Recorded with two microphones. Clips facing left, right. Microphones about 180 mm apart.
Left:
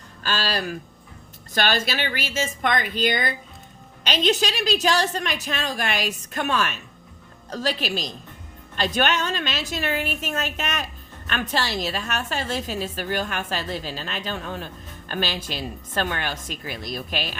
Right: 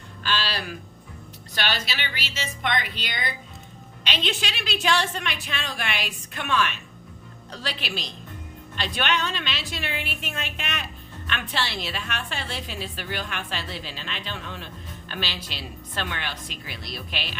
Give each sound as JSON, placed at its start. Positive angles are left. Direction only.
{"t": 0.2, "sound": "a woman's voice", "side_deg": 45}